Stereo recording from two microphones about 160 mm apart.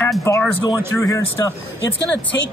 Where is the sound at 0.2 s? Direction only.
20° left (ahead or behind).